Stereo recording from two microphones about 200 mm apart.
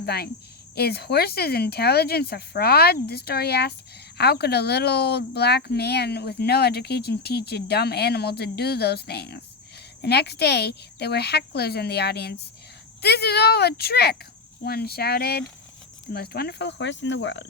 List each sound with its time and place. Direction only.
0.0 s a woman's voice: 50° left (ahead or behind)